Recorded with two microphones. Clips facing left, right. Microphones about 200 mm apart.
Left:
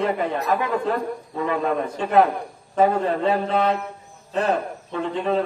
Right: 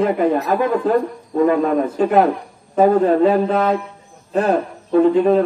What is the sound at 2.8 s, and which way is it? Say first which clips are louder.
A man's voice: right 7 dB; 40° right (ahead or behind).